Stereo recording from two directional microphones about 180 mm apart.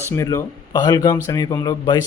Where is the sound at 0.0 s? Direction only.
15° left (ahead or behind).